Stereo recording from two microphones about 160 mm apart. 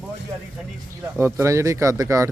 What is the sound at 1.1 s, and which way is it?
Speech, 15° right (ahead or behind).